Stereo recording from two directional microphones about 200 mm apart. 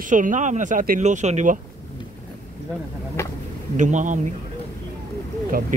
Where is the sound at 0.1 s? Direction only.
40° right (ahead or behind).